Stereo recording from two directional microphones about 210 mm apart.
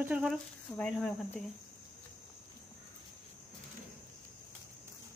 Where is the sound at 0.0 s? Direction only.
5° right (ahead or behind).